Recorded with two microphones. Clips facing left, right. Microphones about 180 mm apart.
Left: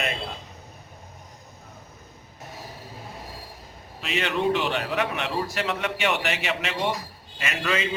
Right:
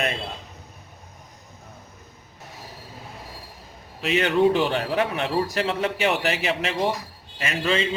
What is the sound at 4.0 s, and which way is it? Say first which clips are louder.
A man's voice: right 6 dB; 35° right (ahead or behind).